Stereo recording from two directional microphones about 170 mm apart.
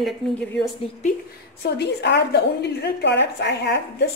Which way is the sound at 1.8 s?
80° left.